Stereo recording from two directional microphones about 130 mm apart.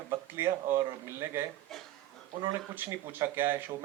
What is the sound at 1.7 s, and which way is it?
Speech, centre (ahead or behind).